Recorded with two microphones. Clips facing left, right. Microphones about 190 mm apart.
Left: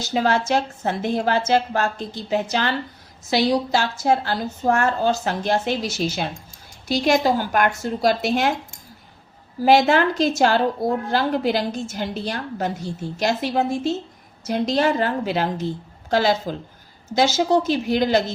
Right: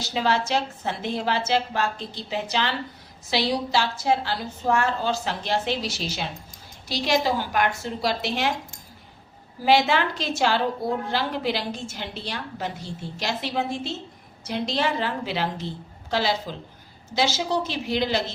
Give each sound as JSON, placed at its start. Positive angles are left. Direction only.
{"t": 0.0, "sound": "a woman's voice", "side_deg": 50}
{"t": 9.6, "sound": "a woman's voice", "side_deg": 45}